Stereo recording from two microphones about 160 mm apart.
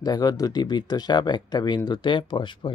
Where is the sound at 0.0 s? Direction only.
25° left (ahead or behind).